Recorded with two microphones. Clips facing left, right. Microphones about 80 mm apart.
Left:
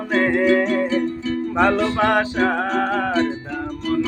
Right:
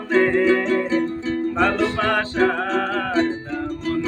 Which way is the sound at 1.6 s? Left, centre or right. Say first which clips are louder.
Left 3 dB; centre.